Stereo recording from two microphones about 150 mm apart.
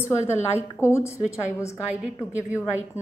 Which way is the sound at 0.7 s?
15° left (ahead or behind).